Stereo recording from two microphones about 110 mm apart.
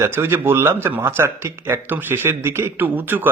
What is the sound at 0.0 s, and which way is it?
Speech, 20° right (ahead or behind).